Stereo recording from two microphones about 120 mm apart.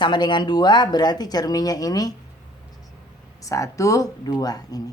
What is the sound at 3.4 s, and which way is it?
Speech, 25° left (ahead or behind).